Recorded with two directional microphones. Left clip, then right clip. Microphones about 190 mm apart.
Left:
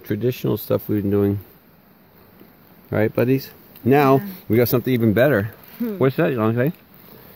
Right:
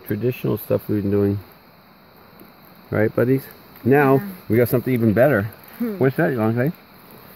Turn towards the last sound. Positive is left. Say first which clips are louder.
# left 1 dB
turn(degrees=20)  # may be behind; listen again after turning